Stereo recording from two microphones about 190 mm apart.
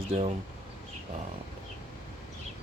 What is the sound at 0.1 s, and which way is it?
Speech, 30° right (ahead or behind).